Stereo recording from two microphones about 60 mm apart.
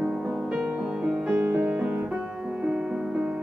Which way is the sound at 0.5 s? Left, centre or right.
Centre.